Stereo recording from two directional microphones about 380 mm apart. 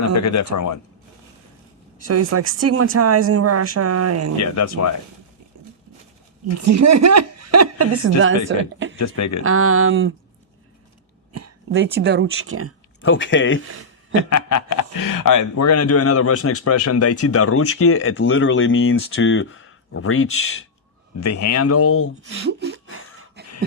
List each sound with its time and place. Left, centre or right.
0.0 s speech: left
2.0 s speech: right
4.4 s speech: left
5.5 s a sound: right
6.6 s speech: right
9.0 s speech: left
9.4 s speech: right
11.3 s speech: right
13.0 s speech: left
13.7 s a sound: right
14.2 s speech: left
22.4 s speech: right
23.3 s cough: right